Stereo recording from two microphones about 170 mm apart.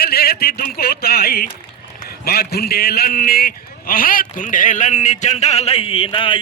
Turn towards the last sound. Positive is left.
turn(degrees=30)  # may be behind; listen again after turning